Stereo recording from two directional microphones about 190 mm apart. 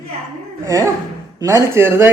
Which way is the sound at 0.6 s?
15° right (ahead or behind).